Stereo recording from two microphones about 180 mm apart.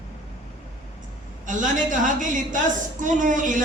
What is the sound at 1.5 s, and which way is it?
A man's voice, 45° right (ahead or behind).